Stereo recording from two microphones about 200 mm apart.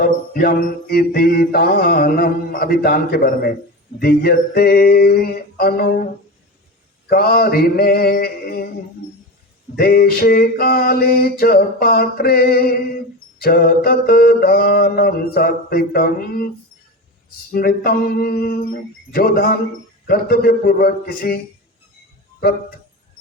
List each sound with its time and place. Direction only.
0.0 s mantra: 50° left (ahead or behind)
7.1 s mantra: 50° left (ahead or behind)
9.7 s mantra: 50° left (ahead or behind)
17.5 s mantra: 45° left (ahead or behind)